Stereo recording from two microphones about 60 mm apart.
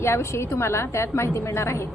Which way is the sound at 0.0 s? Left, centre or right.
Left.